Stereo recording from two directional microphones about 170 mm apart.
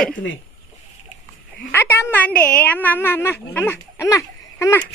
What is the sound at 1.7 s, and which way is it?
A woman's voice, 15° left (ahead or behind).